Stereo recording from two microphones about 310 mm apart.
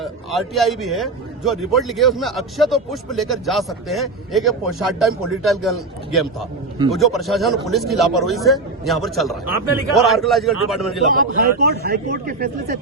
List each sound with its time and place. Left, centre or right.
0.0 s a man's voice: centre
11.1 s a man's voice: right